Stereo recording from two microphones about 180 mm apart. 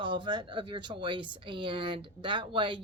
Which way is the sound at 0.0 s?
25° right (ahead or behind).